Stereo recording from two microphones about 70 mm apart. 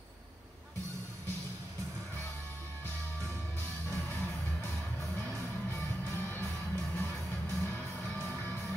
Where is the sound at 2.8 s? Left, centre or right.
Left.